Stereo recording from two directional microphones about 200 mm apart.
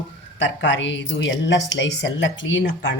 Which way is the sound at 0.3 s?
65° left (ahead or behind).